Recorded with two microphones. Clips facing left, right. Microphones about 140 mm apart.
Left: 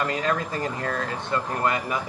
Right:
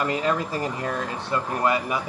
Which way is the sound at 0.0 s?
20° right (ahead or behind).